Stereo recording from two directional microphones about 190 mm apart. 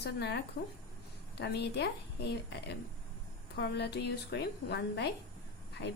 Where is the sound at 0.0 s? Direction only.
60° left (ahead or behind).